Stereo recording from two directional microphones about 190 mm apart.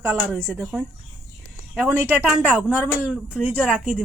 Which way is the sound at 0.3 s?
5° left (ahead or behind).